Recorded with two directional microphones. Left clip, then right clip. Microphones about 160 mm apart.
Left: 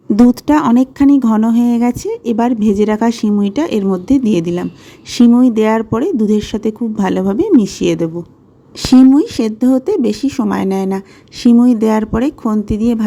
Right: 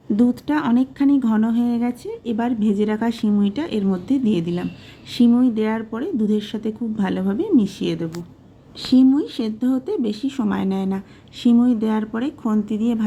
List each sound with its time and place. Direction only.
0.3 s speech: 40° left (ahead or behind)
9.1 s speech: 45° left (ahead or behind)